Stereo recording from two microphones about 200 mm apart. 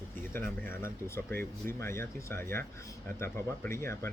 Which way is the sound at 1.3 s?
10° left (ahead or behind).